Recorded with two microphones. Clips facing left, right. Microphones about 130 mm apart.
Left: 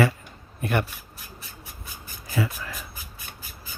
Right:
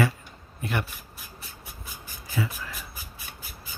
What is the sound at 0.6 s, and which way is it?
Speech, 55° left (ahead or behind).